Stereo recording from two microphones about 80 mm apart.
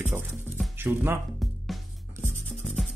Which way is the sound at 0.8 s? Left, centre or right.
Right.